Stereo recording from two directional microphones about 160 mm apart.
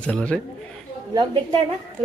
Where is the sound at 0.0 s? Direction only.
10° left (ahead or behind).